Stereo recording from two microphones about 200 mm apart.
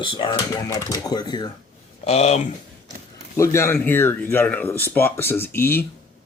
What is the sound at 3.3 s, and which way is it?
Speech, 15° left (ahead or behind).